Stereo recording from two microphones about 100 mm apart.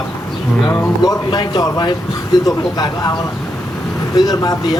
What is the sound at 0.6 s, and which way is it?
Speech, 45° left (ahead or behind).